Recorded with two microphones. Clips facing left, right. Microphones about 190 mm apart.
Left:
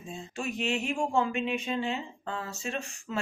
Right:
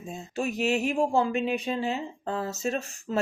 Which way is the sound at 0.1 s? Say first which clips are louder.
Right 5 dB; 40° right (ahead or behind).